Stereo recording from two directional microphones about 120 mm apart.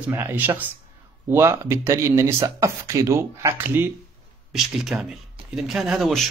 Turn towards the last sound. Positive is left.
turn(degrees=0)  # may be behind; listen again after turning